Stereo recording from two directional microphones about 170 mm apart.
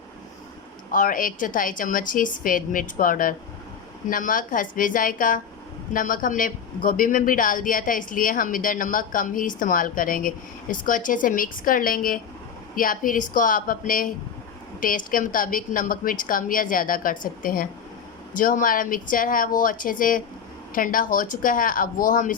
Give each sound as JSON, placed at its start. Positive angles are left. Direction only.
{"t": 0.9, "sound": "a man's voice", "side_deg": 55}